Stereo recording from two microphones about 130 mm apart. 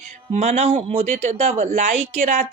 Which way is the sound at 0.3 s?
55° right (ahead or behind).